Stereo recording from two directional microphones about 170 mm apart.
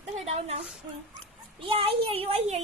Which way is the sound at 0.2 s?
35° right (ahead or behind).